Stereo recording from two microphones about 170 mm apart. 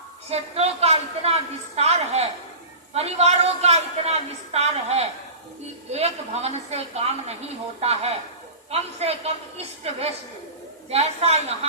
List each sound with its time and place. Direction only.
0.3 s a woman's voice: 35° right (ahead or behind)